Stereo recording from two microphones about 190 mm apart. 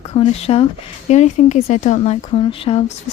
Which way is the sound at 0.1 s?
35° left (ahead or behind).